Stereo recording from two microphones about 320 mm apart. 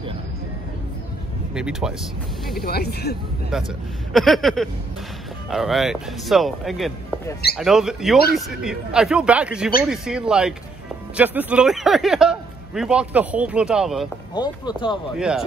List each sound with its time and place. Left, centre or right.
1.5 s a man's voice: centre
2.6 s speech: left
3.5 s a man's voice: centre
14.3 s speech: centre
15.1 s a man's voice: centre